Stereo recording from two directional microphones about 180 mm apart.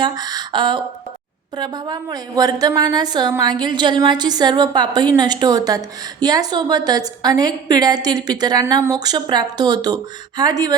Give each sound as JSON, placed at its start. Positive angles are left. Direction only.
{"t": 0.0, "sound": "a woman's voice", "side_deg": -20}